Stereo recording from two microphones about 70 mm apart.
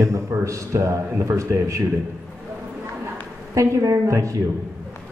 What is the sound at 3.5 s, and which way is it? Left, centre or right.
Speech, right.